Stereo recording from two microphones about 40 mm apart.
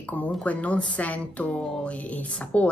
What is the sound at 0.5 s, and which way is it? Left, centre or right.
Speech, left.